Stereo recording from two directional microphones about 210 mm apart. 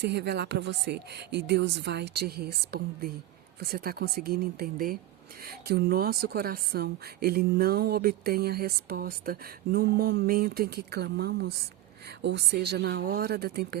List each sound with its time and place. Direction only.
0.0 s speech: 50° right (ahead or behind)